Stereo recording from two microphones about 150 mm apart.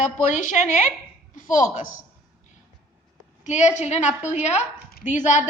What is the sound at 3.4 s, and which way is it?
A woman's voice, 55° left (ahead or behind).